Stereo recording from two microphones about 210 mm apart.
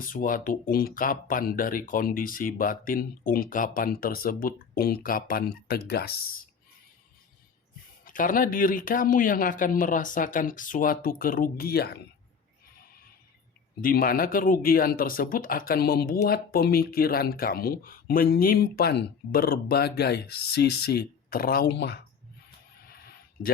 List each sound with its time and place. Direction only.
0.0 s speech: 40° left (ahead or behind)
8.0 s speech: 40° left (ahead or behind)
13.8 s speech: 45° left (ahead or behind)
23.4 s speech: 45° left (ahead or behind)